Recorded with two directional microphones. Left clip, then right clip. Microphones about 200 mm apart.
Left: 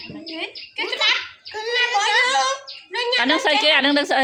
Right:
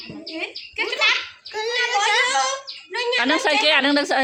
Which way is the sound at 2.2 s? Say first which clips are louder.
Left 1 dB; 15° left (ahead or behind).